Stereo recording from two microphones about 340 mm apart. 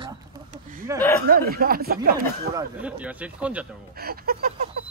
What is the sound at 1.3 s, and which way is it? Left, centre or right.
Speech, right.